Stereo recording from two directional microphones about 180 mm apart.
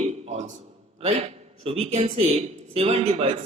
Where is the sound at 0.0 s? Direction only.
35° right (ahead or behind).